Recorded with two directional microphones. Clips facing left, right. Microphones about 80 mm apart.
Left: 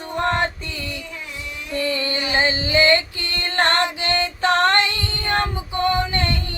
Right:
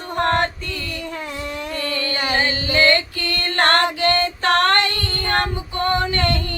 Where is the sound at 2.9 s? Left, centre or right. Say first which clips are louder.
Even; left.